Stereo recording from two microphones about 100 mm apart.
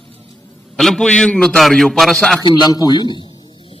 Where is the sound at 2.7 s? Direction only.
40° left (ahead or behind).